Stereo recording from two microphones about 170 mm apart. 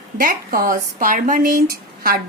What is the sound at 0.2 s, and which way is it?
A woman's voice, 55° right (ahead or behind).